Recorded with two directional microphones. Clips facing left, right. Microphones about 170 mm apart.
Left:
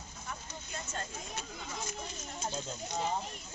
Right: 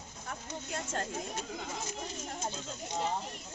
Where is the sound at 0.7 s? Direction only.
65° right (ahead or behind).